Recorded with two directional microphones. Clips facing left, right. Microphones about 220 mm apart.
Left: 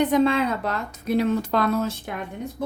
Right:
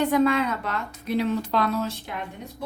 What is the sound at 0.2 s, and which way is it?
Speech, 30° left (ahead or behind).